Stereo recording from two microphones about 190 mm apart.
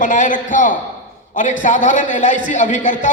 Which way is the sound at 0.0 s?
40° left (ahead or behind).